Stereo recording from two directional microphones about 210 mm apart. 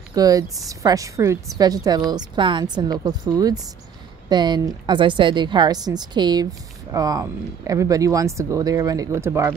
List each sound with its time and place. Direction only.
0.1 s a woman's voice: 15° right (ahead or behind)